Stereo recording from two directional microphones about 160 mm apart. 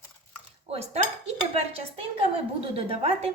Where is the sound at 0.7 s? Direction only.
40° right (ahead or behind).